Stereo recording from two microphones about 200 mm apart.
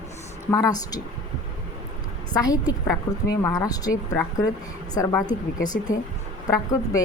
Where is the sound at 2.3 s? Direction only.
20° left (ahead or behind).